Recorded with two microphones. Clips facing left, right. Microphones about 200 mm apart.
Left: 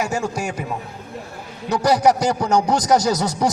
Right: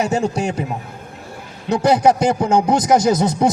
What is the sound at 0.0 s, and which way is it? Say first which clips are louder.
Speech: right 4 dB; 30° right (ahead or behind).